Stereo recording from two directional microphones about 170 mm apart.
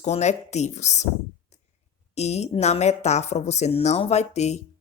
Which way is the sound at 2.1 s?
40° left (ahead or behind).